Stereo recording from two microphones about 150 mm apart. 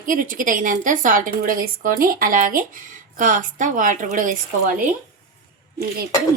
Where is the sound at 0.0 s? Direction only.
65° right (ahead or behind).